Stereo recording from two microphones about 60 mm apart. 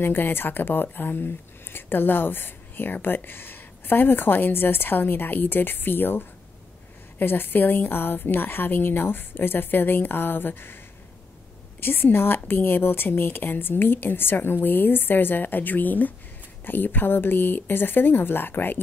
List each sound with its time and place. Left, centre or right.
0.0 s a woman's voice: left
11.8 s a woman's voice: left